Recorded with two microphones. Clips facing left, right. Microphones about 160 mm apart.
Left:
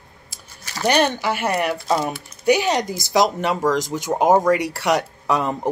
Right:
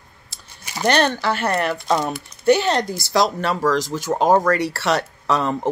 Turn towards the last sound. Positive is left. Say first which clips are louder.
# even
turn(degrees=15)  # may be behind; listen again after turning